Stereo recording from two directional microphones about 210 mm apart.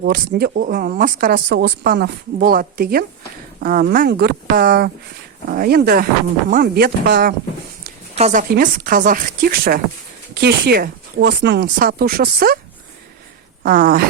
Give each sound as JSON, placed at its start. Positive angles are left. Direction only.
{"t": 0.0, "sound": "speech", "side_deg": -45}
{"t": 1.5, "sound": "speech", "side_deg": -55}
{"t": 8.1, "sound": "speech", "side_deg": -35}
{"t": 13.6, "sound": "speech", "side_deg": -40}